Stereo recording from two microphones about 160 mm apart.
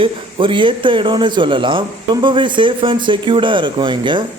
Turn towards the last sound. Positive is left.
turn(degrees=-30)  # may be behind; listen again after turning